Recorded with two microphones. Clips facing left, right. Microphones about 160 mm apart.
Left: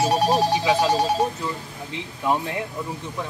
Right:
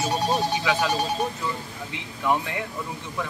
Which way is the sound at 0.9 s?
90° left.